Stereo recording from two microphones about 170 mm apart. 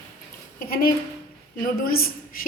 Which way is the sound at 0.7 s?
60° left (ahead or behind).